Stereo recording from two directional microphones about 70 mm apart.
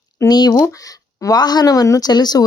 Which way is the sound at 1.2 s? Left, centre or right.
Left.